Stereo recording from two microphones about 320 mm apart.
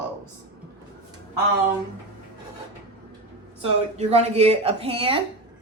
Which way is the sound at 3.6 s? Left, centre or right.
Centre.